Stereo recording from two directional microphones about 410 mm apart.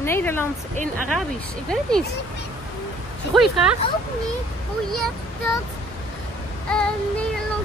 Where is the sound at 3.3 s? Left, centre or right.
Centre.